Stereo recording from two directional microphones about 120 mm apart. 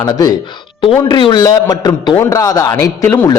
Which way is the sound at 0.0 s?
30° left (ahead or behind).